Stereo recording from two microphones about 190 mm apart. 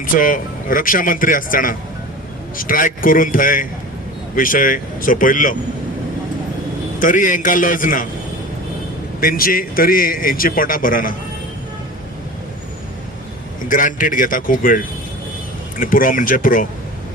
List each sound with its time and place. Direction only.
0.0 s a man's voice: 45° left (ahead or behind)
7.0 s a man's voice: 45° left (ahead or behind)
9.2 s a man's voice: 50° left (ahead or behind)
13.7 s a man's voice: 45° left (ahead or behind)